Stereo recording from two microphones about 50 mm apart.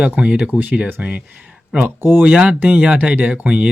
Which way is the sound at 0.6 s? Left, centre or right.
Right.